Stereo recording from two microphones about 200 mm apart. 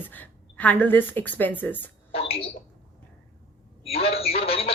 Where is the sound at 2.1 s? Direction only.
30° left (ahead or behind).